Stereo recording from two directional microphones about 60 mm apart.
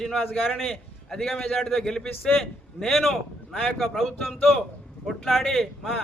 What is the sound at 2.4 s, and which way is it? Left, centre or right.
A man's voice, centre.